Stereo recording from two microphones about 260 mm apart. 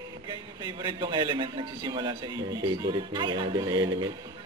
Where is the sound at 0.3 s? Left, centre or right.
Centre.